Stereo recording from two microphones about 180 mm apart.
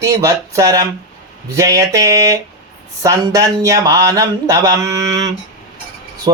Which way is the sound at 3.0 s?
20° right (ahead or behind).